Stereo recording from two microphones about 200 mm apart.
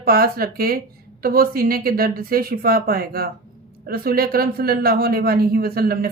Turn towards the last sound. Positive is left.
turn(degrees=-50)  # may be behind; listen again after turning